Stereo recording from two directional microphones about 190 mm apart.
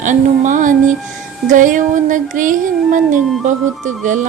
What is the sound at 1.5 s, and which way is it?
A woman's voice, 45° right (ahead or behind).